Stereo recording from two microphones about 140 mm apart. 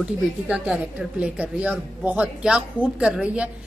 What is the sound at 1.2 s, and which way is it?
A woman's voice, 10° right (ahead or behind).